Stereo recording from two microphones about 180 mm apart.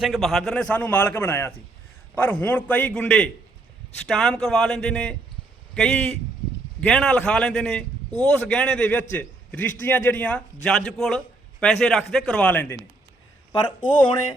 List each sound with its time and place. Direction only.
0.0 s a man's voice: centre (ahead or behind)
13.5 s speech: 25° left (ahead or behind)